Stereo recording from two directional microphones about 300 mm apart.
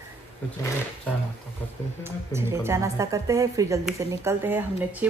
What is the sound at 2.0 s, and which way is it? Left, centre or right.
A woman's voice, centre.